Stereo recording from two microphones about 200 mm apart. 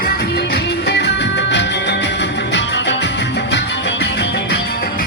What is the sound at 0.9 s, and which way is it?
Music, 60° left (ahead or behind).